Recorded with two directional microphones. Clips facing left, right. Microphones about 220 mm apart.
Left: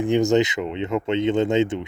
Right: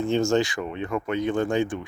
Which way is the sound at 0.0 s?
15° left (ahead or behind).